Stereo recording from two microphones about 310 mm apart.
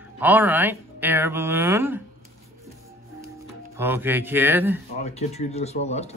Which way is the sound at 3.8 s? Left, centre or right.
Centre.